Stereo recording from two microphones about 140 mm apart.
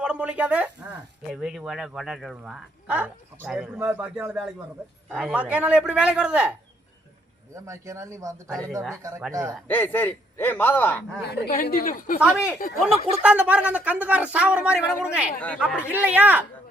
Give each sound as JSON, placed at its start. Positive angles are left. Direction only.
{"t": 0.0, "sound": "speech", "side_deg": -10}
{"t": 7.5, "sound": "speech", "side_deg": -20}
{"t": 9.6, "sound": "a man's voice", "side_deg": 15}
{"t": 11.4, "sound": "a woman's voice", "side_deg": 90}
{"t": 12.2, "sound": "speech", "side_deg": -10}
{"t": 15.4, "sound": "a man's voice", "side_deg": 10}
{"t": 15.9, "sound": "speech", "side_deg": -10}